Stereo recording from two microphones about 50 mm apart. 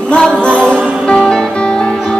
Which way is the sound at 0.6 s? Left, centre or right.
Centre.